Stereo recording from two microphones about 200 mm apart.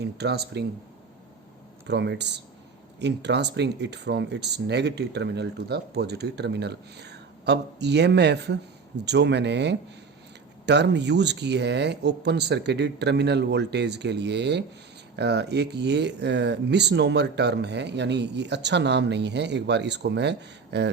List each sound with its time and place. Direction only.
0.0 s speech: 55° right (ahead or behind)
1.9 s speech: 60° right (ahead or behind)